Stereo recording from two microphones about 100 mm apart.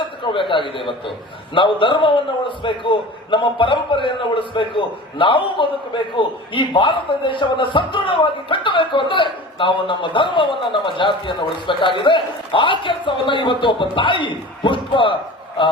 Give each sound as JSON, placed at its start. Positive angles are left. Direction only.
{"t": 0.0, "sound": "a man's voice", "side_deg": 55}